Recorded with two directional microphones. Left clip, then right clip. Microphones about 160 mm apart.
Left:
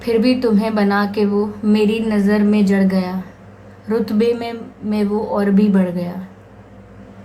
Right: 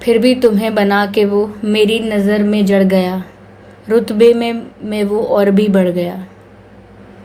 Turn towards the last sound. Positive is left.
turn(degrees=-30)  # may be behind; listen again after turning